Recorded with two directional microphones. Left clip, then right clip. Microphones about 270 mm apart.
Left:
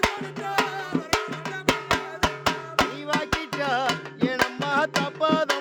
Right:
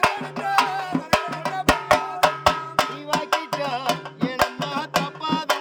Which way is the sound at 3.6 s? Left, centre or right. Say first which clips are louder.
Left 2 dB; centre.